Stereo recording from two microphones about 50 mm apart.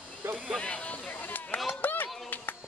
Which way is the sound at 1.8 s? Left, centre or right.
Left.